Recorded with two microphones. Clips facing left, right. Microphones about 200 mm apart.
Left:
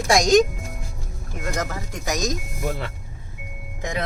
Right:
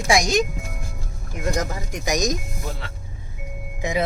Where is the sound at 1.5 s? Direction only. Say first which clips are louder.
Right 2 dB; 15° right (ahead or behind).